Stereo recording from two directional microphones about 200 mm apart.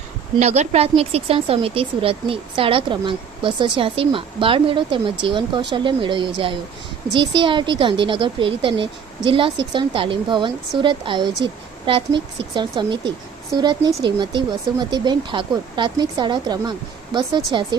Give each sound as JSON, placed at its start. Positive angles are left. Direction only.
{"t": 0.3, "sound": "speech", "side_deg": -35}